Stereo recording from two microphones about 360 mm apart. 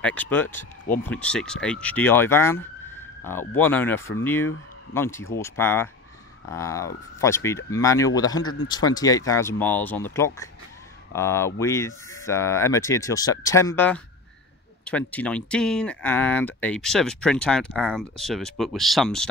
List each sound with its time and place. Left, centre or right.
0.0 s speech: centre